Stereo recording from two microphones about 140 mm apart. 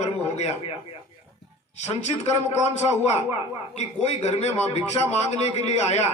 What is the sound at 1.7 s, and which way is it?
Speech, 55° left (ahead or behind).